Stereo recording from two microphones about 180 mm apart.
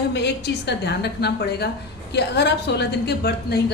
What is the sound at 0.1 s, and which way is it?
A woman's voice, 70° left (ahead or behind).